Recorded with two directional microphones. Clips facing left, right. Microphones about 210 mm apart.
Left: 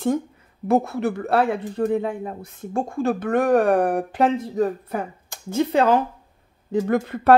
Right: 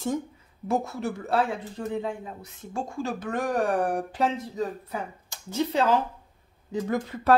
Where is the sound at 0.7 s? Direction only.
60° left (ahead or behind).